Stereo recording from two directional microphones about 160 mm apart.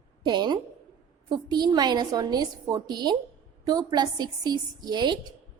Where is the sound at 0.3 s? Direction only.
25° right (ahead or behind).